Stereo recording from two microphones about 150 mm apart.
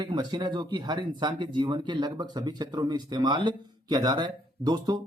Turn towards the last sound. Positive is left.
turn(degrees=-30)  # may be behind; listen again after turning